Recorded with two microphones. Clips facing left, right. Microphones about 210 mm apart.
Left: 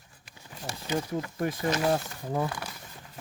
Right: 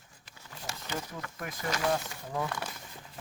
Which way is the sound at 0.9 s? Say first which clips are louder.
Left 10 dB; 30° left (ahead or behind).